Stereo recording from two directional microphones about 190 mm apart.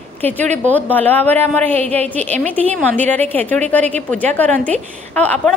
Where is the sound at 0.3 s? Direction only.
10° left (ahead or behind).